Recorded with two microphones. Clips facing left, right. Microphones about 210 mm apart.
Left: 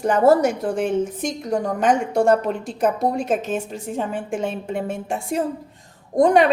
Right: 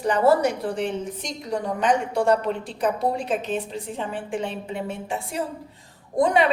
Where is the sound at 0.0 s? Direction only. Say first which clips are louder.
Left 3 dB; 45° left (ahead or behind).